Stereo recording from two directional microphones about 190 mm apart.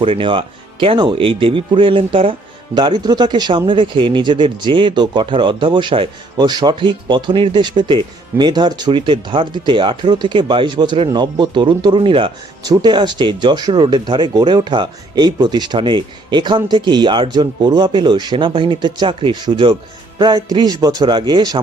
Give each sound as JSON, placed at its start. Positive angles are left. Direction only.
{"t": 0.0, "sound": "speech", "side_deg": -25}